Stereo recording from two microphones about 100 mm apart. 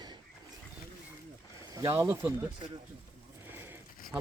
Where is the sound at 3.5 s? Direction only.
20° right (ahead or behind).